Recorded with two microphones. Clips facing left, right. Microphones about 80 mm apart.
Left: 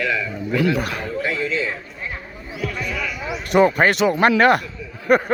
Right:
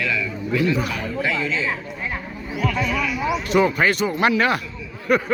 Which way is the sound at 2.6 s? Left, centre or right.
Right.